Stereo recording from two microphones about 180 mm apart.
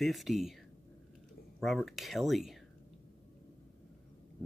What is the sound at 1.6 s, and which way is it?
Speech, centre (ahead or behind).